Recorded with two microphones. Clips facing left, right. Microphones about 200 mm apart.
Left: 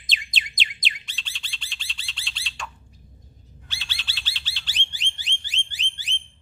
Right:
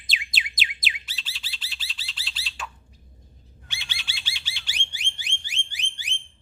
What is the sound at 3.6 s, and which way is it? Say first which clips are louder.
Bird: even; 15° right (ahead or behind).